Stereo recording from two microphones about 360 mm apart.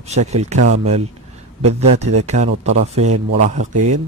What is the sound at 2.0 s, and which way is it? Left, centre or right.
A man's voice, centre.